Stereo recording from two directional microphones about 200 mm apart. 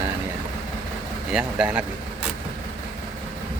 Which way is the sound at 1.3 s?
5° right (ahead or behind).